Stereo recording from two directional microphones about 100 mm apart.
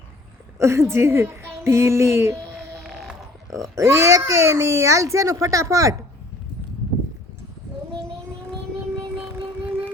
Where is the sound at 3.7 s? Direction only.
30° right (ahead or behind).